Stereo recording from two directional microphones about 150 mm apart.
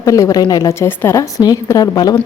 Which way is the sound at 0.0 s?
20° left (ahead or behind).